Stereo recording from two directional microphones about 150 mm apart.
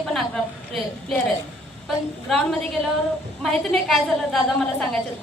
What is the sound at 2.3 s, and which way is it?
A woman's voice, centre (ahead or behind).